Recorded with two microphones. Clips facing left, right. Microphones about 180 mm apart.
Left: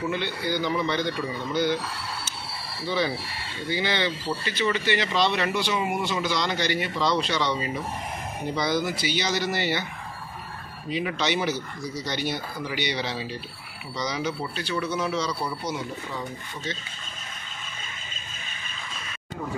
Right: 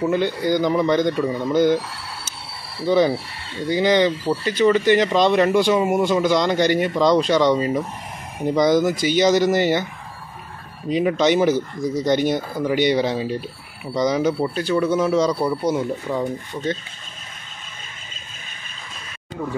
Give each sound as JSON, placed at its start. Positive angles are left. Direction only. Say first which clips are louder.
{"t": 0.0, "sound": "speech", "louder": "right 8 dB", "side_deg": -45}
{"t": 2.9, "sound": "speech", "louder": "right 10 dB", "side_deg": -45}
{"t": 10.9, "sound": "speech", "louder": "right 9 dB", "side_deg": -45}